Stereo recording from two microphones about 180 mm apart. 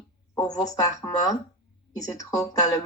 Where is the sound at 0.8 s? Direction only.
20° left (ahead or behind).